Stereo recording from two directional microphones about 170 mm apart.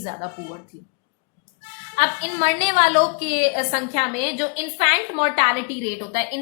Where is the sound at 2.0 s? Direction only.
40° right (ahead or behind).